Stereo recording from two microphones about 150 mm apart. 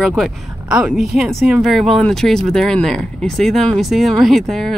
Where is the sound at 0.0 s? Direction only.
Centre (ahead or behind).